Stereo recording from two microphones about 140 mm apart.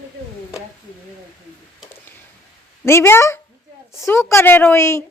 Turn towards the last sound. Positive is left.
turn(degrees=20)  # may be behind; listen again after turning